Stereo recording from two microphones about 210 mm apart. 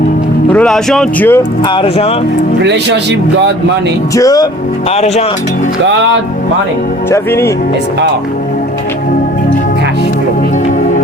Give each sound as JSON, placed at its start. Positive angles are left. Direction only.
{"t": 0.5, "sound": "speech", "side_deg": 5}
{"t": 1.6, "sound": "speech", "side_deg": 25}
{"t": 2.6, "sound": "speech", "side_deg": -55}
{"t": 4.1, "sound": "speech", "side_deg": 15}
{"t": 4.9, "sound": "speech", "side_deg": 30}
{"t": 5.8, "sound": "speech", "side_deg": -60}
{"t": 7.1, "sound": "speech", "side_deg": 10}